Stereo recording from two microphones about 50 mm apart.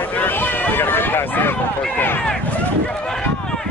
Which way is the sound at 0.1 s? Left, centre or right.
Left.